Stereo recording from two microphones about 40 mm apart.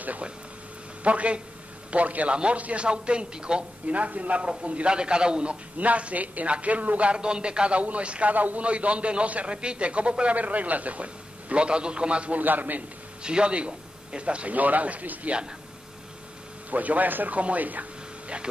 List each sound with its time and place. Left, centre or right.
1.0 s a man's voice: right
3.8 s a man's voice: right
7.1 s a man's voice: right
8.3 s a man's voice: right
8.6 s a man's voice: right
12.3 s a man's voice: right
13.2 s a man's voice: right
14.5 s a man's voice: right
16.7 s a man's voice: right